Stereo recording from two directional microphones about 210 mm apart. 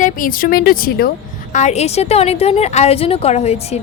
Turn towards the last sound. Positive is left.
turn(degrees=30)  # may be behind; listen again after turning